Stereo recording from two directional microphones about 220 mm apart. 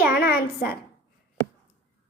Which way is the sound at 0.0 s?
45° left (ahead or behind).